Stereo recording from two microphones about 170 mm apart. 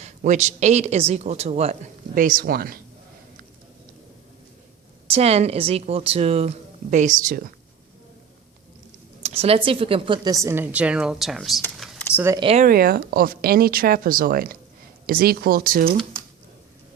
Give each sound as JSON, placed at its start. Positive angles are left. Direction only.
{"t": 0.0, "sound": "speech", "side_deg": -45}
{"t": 5.0, "sound": "speech", "side_deg": -35}
{"t": 9.2, "sound": "speech", "side_deg": -35}
{"t": 12.1, "sound": "speech", "side_deg": -15}
{"t": 12.4, "sound": "speech", "side_deg": -35}
{"t": 12.6, "sound": "speech", "side_deg": -60}